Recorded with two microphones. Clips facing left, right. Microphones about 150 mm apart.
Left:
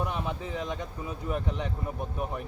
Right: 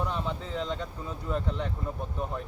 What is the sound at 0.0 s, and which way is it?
Speech, 15° left (ahead or behind).